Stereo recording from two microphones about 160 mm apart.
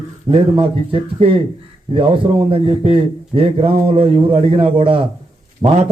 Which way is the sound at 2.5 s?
35° right (ahead or behind).